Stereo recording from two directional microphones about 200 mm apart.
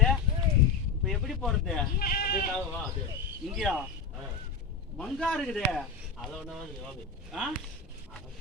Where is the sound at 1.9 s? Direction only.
50° left (ahead or behind).